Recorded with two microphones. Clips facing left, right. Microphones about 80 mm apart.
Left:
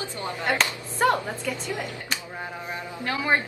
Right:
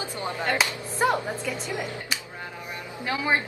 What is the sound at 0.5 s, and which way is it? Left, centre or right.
Speech, centre.